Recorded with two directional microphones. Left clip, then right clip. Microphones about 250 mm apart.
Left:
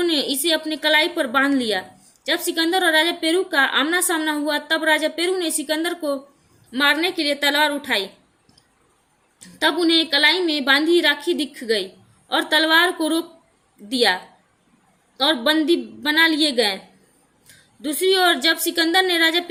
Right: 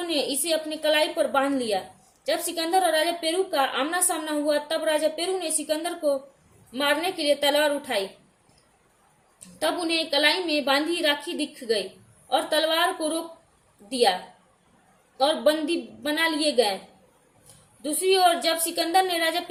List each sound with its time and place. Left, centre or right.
0.0 s a woman's voice: left
9.6 s a woman's voice: left
15.2 s a woman's voice: left
17.8 s a woman's voice: left